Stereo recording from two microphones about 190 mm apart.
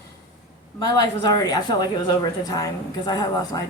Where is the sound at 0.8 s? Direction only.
20° left (ahead or behind).